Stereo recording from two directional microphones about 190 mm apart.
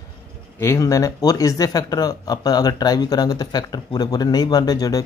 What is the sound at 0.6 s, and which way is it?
Speech, 15° left (ahead or behind).